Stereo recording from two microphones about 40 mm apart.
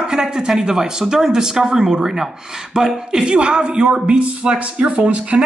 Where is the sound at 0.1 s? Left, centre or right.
Centre.